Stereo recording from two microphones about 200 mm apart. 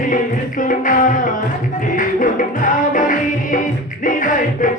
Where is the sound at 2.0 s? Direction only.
40° left (ahead or behind).